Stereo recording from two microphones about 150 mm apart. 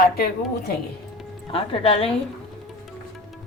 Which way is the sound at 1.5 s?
40° left (ahead or behind).